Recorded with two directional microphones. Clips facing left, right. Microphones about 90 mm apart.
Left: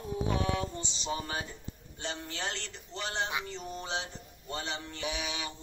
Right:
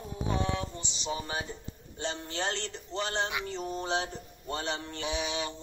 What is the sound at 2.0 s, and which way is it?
Speech, 35° right (ahead or behind).